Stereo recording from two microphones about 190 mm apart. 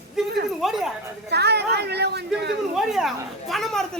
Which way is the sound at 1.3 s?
60° right (ahead or behind).